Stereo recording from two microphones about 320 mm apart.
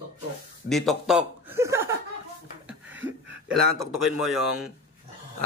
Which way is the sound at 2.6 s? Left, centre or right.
Centre.